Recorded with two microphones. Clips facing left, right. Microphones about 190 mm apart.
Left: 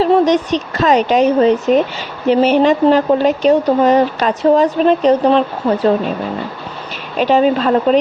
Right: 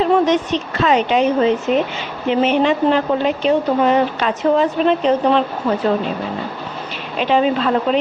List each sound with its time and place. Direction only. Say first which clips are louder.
0.0 s speech: left 3 dB; 35° left (ahead or behind)
7.2 s speech: left 4 dB; 40° left (ahead or behind)